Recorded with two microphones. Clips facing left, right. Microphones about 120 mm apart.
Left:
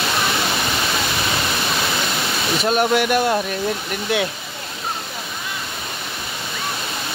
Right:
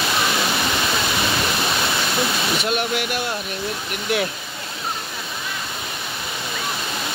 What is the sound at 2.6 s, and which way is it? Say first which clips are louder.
Speech: left 6 dB; 45° left (ahead or behind).